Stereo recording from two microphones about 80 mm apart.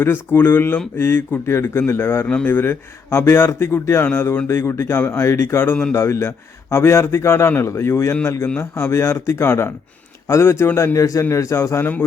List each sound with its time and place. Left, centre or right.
0.0 s a man's voice: left
2.2 s a man's voice: centre
5.9 s a man's voice: left